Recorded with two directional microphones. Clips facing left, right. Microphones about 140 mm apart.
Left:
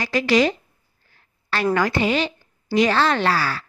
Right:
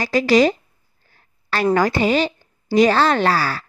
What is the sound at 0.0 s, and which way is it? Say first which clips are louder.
A woman's voice: right 4 dB; 40° right (ahead or behind).